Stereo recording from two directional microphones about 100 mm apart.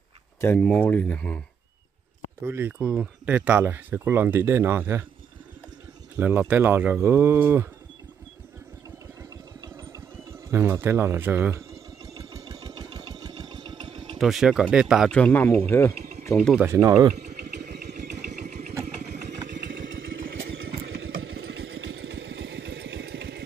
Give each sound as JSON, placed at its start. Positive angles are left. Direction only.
{"t": 0.6, "sound": "speech", "side_deg": 15}
{"t": 2.4, "sound": "speech", "side_deg": -20}
{"t": 6.1, "sound": "speech", "side_deg": -15}
{"t": 10.5, "sound": "speech", "side_deg": -25}
{"t": 12.2, "sound": "engine", "side_deg": -35}
{"t": 14.1, "sound": "speech", "side_deg": -5}
{"t": 15.0, "sound": "speech", "side_deg": 10}
{"t": 15.4, "sound": "speech", "side_deg": 25}
{"t": 16.6, "sound": "speech", "side_deg": -30}